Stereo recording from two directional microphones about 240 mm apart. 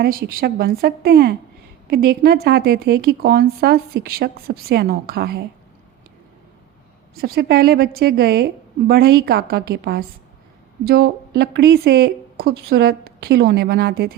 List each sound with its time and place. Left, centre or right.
0.0 s a woman's voice: right
7.2 s a woman's voice: right